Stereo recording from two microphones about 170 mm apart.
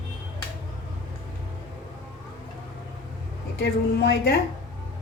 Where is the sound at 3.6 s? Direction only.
70° left (ahead or behind).